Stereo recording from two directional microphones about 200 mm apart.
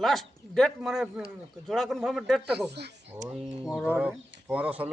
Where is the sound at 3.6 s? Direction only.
5° left (ahead or behind).